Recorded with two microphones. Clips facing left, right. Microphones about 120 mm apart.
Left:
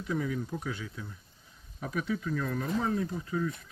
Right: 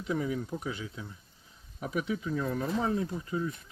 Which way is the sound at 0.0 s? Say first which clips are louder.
Right 1 dB; 20° right (ahead or behind).